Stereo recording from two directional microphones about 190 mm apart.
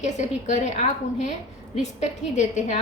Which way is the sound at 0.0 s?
40° left (ahead or behind).